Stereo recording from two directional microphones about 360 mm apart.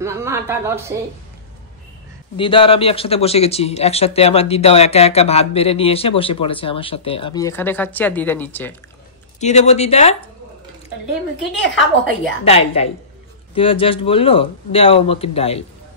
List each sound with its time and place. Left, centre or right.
0.0 s a woman's voice: centre
2.3 s a man's voice: centre
9.4 s a man's voice: centre
11.5 s a woman's voice: left
12.4 s a man's voice: centre